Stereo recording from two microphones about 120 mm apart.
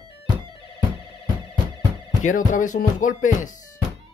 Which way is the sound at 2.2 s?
90° left.